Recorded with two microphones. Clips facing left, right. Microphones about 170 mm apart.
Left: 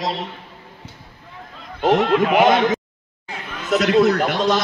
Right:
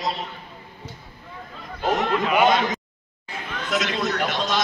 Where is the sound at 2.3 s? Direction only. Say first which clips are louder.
Left 3 dB; 50° left (ahead or behind).